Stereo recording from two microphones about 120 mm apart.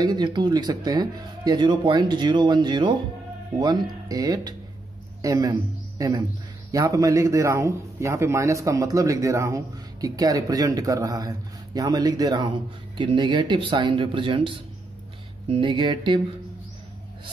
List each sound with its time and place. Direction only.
0.0 s a man's voice: 35° right (ahead or behind)